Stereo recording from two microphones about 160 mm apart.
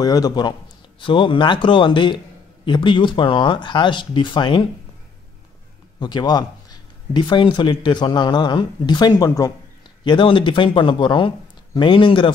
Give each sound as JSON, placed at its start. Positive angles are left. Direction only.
{"t": 0.0, "sound": "a man's voice", "side_deg": 25}
{"t": 5.9, "sound": "a man's voice", "side_deg": 25}